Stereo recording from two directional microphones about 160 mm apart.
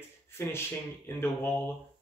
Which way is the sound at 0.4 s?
15° left (ahead or behind).